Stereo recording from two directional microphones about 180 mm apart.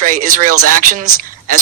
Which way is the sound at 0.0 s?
50° right (ahead or behind).